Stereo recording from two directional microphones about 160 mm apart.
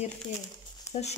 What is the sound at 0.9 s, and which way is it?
Speech, 45° left (ahead or behind).